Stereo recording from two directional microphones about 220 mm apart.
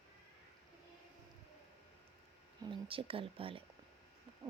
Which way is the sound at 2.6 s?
25° right (ahead or behind).